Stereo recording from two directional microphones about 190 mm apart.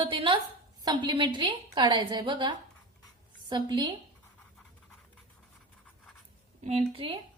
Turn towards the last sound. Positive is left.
turn(degrees=-30)  # may be behind; listen again after turning